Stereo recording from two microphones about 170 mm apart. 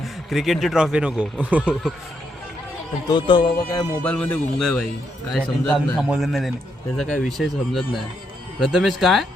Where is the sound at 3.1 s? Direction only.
30° left (ahead or behind).